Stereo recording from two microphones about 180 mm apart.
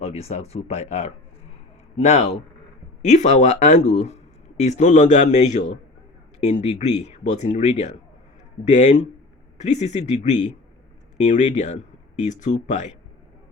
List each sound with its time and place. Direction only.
0.0 s speech: 35° left (ahead or behind)